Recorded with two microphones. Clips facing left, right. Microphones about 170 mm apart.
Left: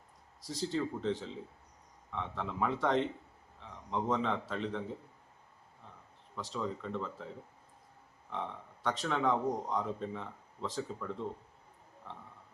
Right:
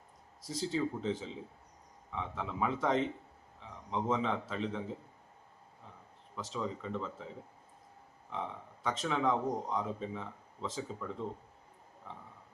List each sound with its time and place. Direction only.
0.4 s speech: centre (ahead or behind)
6.3 s speech: centre (ahead or behind)
8.8 s speech: centre (ahead or behind)